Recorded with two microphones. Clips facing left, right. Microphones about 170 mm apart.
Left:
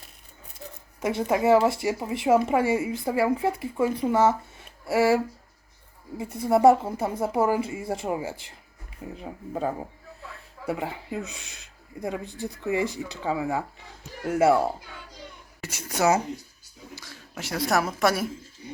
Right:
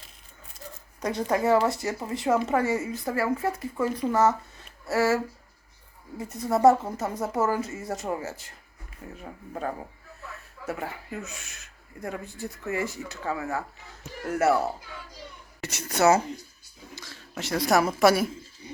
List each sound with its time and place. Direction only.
1.3 s a woman's voice: 10° left (ahead or behind)
9.1 s a woman's voice: 25° left (ahead or behind); by 18.3 s centre (ahead or behind)